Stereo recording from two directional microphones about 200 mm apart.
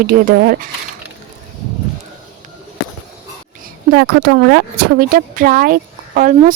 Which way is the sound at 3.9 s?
50° right (ahead or behind).